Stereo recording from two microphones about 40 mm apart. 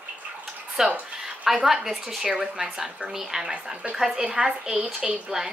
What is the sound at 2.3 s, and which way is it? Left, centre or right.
A woman's voice, right.